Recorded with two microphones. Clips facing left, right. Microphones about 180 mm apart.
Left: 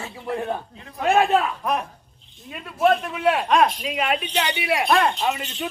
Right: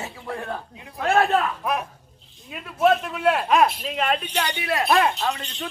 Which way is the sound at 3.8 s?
10° left (ahead or behind).